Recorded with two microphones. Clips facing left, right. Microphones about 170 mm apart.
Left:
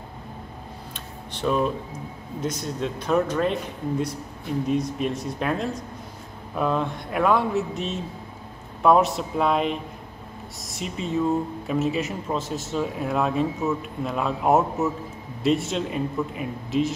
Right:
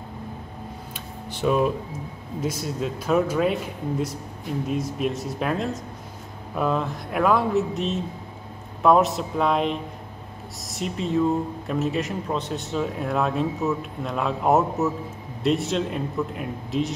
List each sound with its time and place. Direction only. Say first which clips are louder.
1.3 s speech: right 2 dB; 5° right (ahead or behind)
4.6 s speech: left 1 dB; centre (ahead or behind)